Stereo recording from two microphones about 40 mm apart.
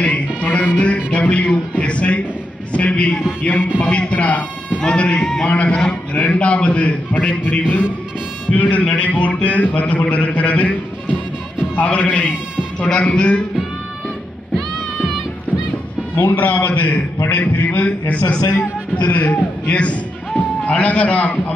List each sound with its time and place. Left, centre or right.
0.0 s music: left
2.7 s a man's voice: left
3.4 s a man's voice: left
3.8 s a man's voice: left
11.7 s a man's voice: left
12.8 s a man's voice: left
16.2 s a man's voice: left